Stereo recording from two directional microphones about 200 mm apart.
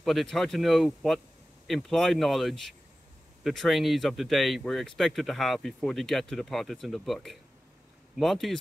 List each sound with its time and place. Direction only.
0.0 s speech: centre (ahead or behind)